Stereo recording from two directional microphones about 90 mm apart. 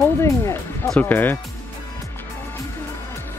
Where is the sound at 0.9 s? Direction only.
20° left (ahead or behind).